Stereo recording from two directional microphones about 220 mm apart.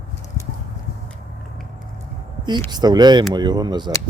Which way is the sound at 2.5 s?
20° right (ahead or behind).